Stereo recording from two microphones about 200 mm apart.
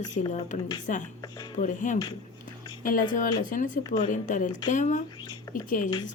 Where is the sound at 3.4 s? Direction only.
40° left (ahead or behind).